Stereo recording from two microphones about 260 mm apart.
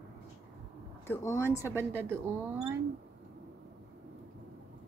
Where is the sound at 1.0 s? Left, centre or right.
Centre.